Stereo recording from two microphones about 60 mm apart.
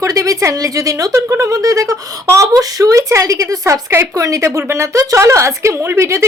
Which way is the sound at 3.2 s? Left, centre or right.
Right.